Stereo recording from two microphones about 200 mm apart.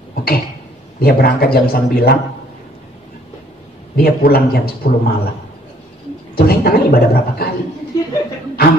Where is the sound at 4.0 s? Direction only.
50° left (ahead or behind).